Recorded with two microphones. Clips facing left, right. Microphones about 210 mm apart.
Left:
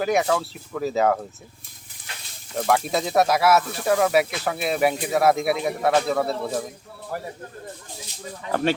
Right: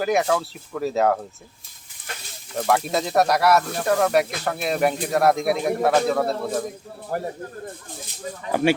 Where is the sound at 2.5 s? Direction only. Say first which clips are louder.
Even; centre (ahead or behind).